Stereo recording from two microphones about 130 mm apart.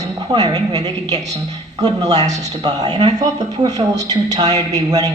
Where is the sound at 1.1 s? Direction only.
60° right (ahead or behind).